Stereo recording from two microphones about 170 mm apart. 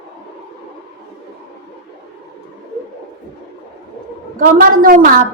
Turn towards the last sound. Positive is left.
turn(degrees=-60)  # may be behind; listen again after turning